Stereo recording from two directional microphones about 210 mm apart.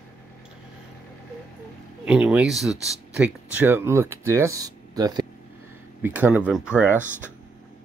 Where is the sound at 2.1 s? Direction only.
5° right (ahead or behind).